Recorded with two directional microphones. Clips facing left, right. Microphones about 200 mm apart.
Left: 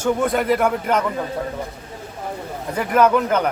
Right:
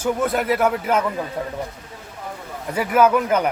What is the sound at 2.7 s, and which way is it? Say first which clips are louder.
Speech: even; 5° right (ahead or behind).